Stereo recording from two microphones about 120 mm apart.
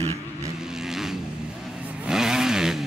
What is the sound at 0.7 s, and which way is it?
Vehicle, 5° right (ahead or behind).